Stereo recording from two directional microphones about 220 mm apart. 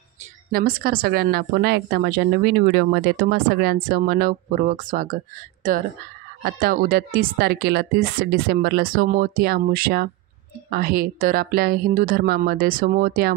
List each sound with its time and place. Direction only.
0.5 s a woman's voice: 40° right (ahead or behind)